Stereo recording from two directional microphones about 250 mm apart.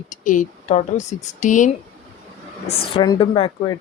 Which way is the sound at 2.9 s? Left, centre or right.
Centre.